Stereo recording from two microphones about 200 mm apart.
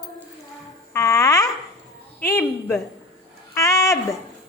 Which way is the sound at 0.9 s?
15° left (ahead or behind).